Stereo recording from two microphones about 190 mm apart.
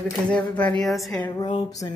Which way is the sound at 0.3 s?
5° left (ahead or behind).